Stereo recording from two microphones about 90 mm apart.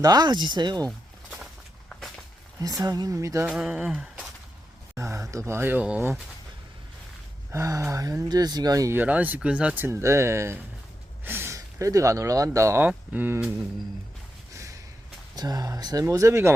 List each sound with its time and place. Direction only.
0.0 s speech: 45° right (ahead or behind)
2.6 s speech: 40° right (ahead or behind)
3.5 s a sound: 10° right (ahead or behind)
4.9 s speech: 35° right (ahead or behind)
7.5 s speech: 35° right (ahead or behind)
8.9 s speech: 20° right (ahead or behind)
9.8 s speech: 30° right (ahead or behind)
11.2 s a sound: 25° right (ahead or behind)
11.5 s speech: 35° right (ahead or behind)
12.8 s speech: 20° right (ahead or behind)
14.5 s a sound: 35° right (ahead or behind)
15.4 s speech: 45° right (ahead or behind)
16.0 s speech: 30° right (ahead or behind)